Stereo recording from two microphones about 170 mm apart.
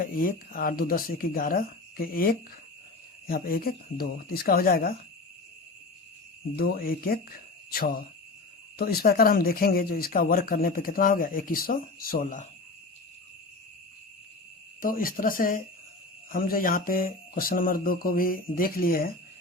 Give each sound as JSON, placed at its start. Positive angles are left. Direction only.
{"t": 0.0, "sound": "speech", "side_deg": 55}
{"t": 6.6, "sound": "speech", "side_deg": 60}
{"t": 14.8, "sound": "speech", "side_deg": 55}